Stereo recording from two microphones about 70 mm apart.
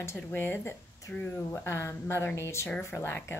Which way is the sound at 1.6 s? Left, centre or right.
Left.